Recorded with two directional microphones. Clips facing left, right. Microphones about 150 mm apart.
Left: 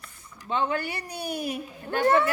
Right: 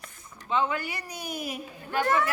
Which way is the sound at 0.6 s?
30° left (ahead or behind).